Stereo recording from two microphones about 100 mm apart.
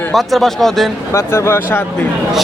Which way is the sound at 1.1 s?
25° left (ahead or behind).